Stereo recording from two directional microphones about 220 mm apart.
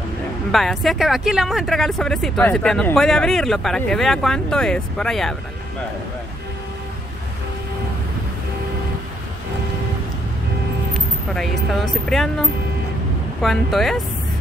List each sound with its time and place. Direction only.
0.5 s speech: centre (ahead or behind)
11.3 s speech: centre (ahead or behind)